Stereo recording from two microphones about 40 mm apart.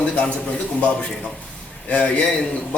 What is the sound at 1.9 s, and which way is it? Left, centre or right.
Speech, left.